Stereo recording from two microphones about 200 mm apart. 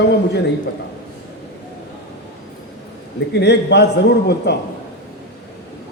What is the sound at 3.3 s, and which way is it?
A man's voice, 55° left (ahead or behind).